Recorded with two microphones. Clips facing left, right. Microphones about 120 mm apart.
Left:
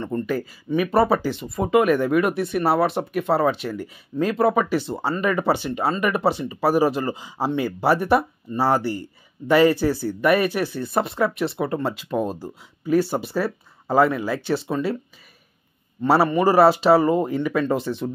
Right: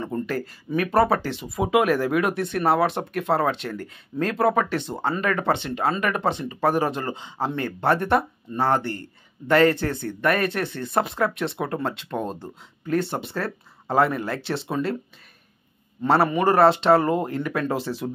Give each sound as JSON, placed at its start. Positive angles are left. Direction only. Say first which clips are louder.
{"t": 0.0, "sound": "speech", "louder": "left 2 dB", "side_deg": 0}
{"t": 16.0, "sound": "speech", "louder": "left 2 dB", "side_deg": 0}